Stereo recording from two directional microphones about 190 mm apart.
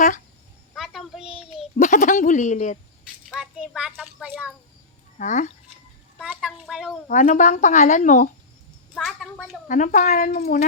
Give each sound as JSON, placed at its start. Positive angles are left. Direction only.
{"t": 0.8, "sound": "child singing", "side_deg": 0}
{"t": 1.7, "sound": "speech", "side_deg": 40}
{"t": 3.2, "sound": "a child's voice", "side_deg": 0}
{"t": 5.1, "sound": "speech", "side_deg": 40}
{"t": 6.1, "sound": "a child's voice", "side_deg": -5}
{"t": 7.1, "sound": "speech", "side_deg": 40}
{"t": 9.0, "sound": "a child's voice", "side_deg": 0}
{"t": 9.6, "sound": "speech", "side_deg": 40}